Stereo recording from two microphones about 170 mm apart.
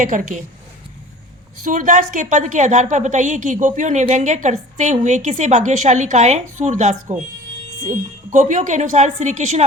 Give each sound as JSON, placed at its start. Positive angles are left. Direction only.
{"t": 0.0, "sound": "a woman's voice", "side_deg": -50}
{"t": 1.6, "sound": "a woman's voice", "side_deg": -50}